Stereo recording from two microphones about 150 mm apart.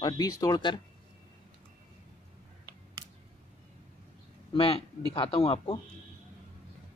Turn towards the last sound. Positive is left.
turn(degrees=35)  # may be behind; listen again after turning